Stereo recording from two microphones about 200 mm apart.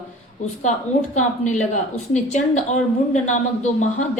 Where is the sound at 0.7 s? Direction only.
40° left (ahead or behind).